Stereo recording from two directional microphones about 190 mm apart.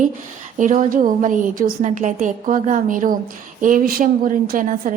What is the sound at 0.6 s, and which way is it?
A woman's voice, 40° right (ahead or behind).